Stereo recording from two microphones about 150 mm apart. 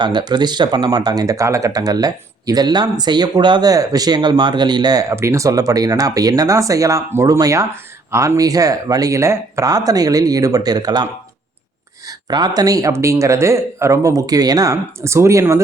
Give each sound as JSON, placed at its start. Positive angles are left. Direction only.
{"t": 0.0, "sound": "speech", "side_deg": -30}